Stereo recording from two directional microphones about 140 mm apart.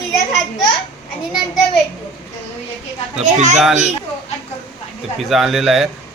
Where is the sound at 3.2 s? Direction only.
60° right (ahead or behind).